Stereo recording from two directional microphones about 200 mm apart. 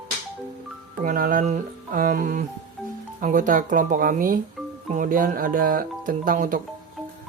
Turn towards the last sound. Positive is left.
turn(degrees=-40)  # may be behind; listen again after turning